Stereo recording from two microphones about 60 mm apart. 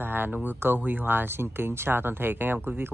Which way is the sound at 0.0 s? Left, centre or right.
Right.